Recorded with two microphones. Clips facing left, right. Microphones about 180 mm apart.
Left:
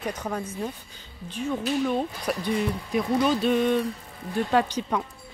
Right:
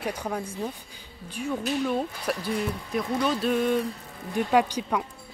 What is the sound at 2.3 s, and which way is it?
Speech, centre (ahead or behind).